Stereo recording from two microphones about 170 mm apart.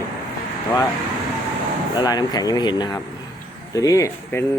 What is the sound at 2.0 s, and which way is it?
Speech, 25° left (ahead or behind).